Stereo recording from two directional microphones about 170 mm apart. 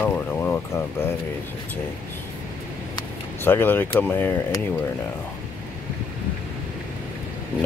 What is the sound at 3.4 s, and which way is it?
Speech, 10° left (ahead or behind).